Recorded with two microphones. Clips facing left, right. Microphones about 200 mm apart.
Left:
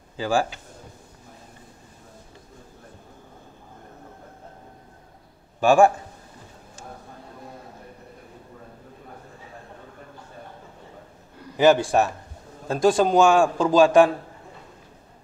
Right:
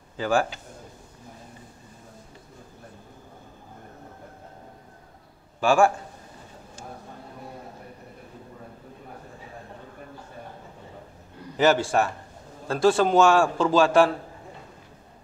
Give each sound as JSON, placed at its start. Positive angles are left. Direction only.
{"t": 0.2, "sound": "a man's voice", "side_deg": 15}
{"t": 5.6, "sound": "a man's voice", "side_deg": 20}
{"t": 11.5, "sound": "a man's voice", "side_deg": 15}